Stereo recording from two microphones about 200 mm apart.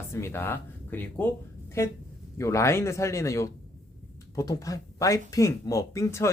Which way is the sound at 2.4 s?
15° left (ahead or behind).